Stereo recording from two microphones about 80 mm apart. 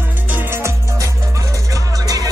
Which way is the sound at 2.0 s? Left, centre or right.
Right.